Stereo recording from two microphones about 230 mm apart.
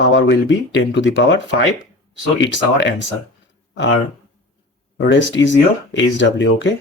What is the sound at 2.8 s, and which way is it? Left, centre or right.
Speech, left.